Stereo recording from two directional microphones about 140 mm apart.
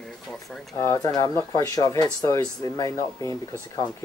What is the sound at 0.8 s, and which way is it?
Speech, 25° left (ahead or behind).